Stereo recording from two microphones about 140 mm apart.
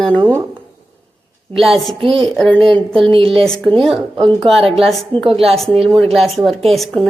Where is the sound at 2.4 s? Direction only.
5° left (ahead or behind).